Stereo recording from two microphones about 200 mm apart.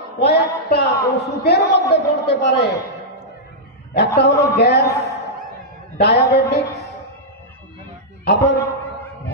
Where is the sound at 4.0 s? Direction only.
55° left (ahead or behind).